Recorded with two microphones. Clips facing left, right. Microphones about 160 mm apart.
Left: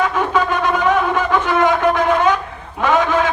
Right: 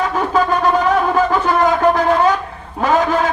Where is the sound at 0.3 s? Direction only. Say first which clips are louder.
Right 5 dB; 35° right (ahead or behind).